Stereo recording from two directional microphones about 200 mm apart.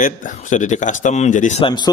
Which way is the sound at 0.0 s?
40° left (ahead or behind).